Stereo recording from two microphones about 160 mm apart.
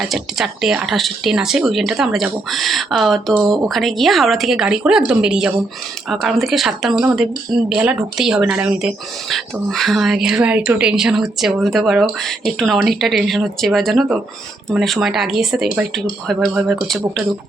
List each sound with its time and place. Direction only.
0.0 s speech: centre (ahead or behind)